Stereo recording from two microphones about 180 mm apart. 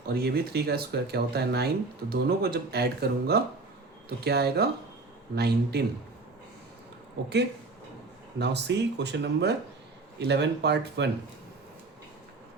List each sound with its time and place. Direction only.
0.1 s speech: 60° right (ahead or behind)
8.4 s speech: 70° right (ahead or behind)